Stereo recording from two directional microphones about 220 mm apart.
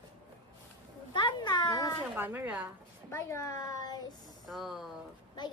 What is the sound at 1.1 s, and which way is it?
Cat, 20° left (ahead or behind).